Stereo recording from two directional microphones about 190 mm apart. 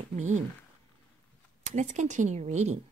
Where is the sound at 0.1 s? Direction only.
40° right (ahead or behind).